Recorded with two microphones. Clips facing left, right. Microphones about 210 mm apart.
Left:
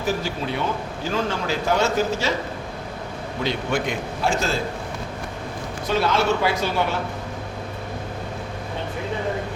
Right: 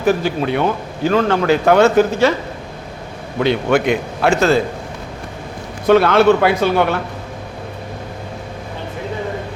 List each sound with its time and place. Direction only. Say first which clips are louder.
0.0 s speech: right 9 dB; 60° right (ahead or behind)
3.4 s speech: right 9 dB; 70° right (ahead or behind)
5.9 s speech: right 10 dB; 60° right (ahead or behind)